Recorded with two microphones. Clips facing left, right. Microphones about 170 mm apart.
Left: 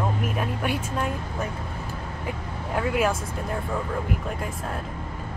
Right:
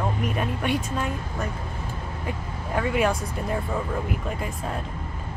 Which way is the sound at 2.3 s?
Centre (ahead or behind).